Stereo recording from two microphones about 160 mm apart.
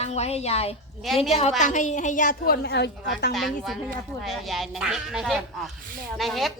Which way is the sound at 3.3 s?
Centre (ahead or behind).